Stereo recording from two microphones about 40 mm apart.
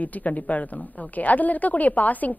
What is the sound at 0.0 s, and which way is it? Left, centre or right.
A woman's voice, left.